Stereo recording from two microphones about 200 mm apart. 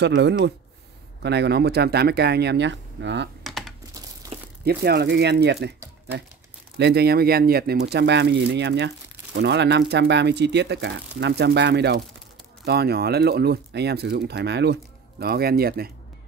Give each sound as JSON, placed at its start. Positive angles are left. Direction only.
{"t": 0.0, "sound": "speech", "side_deg": -60}
{"t": 3.4, "sound": "coin", "side_deg": 0}
{"t": 4.3, "sound": "a sound", "side_deg": -30}
{"t": 4.6, "sound": "speech", "side_deg": -55}
{"t": 6.8, "sound": "speech", "side_deg": -55}